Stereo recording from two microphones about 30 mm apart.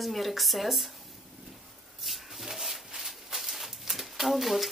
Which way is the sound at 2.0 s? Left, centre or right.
Centre.